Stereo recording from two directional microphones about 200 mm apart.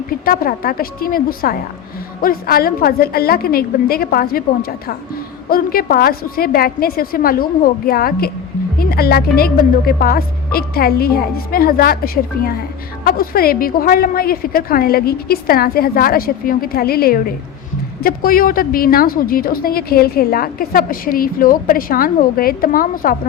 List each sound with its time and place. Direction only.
0.3 s a woman's voice: 45° left (ahead or behind)